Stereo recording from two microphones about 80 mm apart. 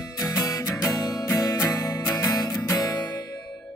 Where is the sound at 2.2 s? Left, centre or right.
Left.